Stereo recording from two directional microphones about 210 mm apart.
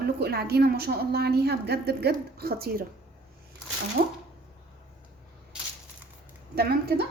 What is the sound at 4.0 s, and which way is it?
Speech, 50° right (ahead or behind).